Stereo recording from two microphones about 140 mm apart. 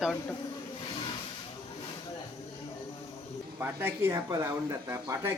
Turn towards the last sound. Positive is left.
turn(degrees=-20)  # may be behind; listen again after turning